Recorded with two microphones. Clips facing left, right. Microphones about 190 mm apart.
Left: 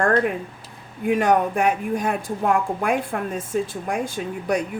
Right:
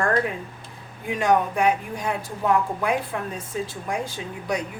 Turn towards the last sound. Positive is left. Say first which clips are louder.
# left 4 dB
turn(degrees=50)  # may be behind; listen again after turning